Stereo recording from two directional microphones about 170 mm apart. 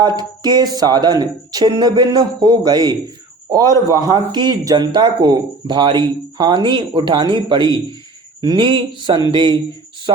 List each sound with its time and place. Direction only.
0.0 s speech: 25° right (ahead or behind)
4.1 s speech: 25° right (ahead or behind)